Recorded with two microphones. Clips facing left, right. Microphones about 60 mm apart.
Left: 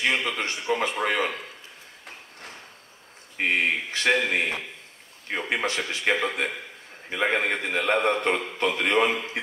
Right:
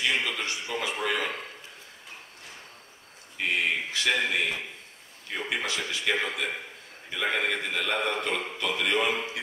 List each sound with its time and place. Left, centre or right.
0.0 s a man's voice: left
3.3 s a man's voice: left